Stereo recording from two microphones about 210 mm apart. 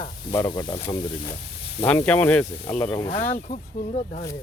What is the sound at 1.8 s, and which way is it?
Speech, 10° left (ahead or behind).